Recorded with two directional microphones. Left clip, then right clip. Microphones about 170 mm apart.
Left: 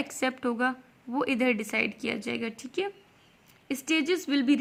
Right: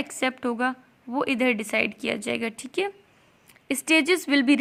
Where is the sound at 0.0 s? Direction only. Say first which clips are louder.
Right 3 dB; 25° right (ahead or behind).